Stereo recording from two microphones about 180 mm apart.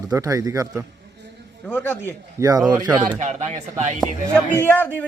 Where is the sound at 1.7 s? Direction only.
10° left (ahead or behind).